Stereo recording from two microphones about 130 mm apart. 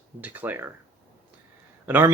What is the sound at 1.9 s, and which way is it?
Speech, 15° right (ahead or behind).